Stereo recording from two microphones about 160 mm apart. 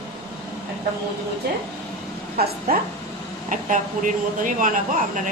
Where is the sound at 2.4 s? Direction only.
70° right (ahead or behind).